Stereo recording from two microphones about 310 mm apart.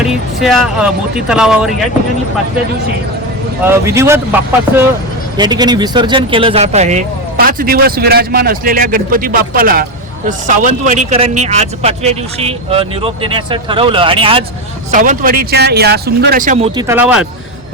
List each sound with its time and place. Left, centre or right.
0.0 s speech: centre
3.6 s speech: centre
5.4 s speech: centre
16.8 s speech: centre